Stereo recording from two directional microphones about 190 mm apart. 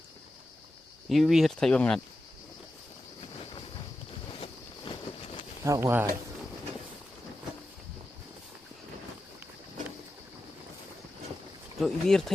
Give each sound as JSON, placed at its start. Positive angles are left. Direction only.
{"t": 1.1, "sound": "speech", "side_deg": 0}
{"t": 4.9, "sound": "a sound", "side_deg": 25}
{"t": 5.6, "sound": "speech", "side_deg": -15}
{"t": 11.8, "sound": "speech", "side_deg": 0}